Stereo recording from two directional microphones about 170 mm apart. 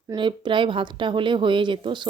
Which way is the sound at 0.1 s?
30° right (ahead or behind).